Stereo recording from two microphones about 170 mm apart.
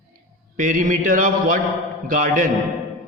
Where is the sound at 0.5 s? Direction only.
50° right (ahead or behind).